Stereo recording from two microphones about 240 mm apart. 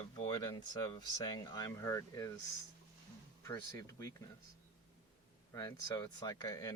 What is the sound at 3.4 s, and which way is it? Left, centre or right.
Speech, centre.